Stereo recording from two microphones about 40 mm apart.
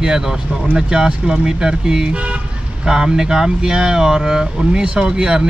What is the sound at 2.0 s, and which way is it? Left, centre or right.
Vehicle, right.